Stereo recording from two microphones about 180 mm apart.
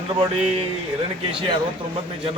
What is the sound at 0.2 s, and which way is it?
Speech, 35° right (ahead or behind).